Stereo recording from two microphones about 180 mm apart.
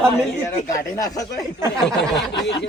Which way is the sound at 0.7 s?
20° left (ahead or behind).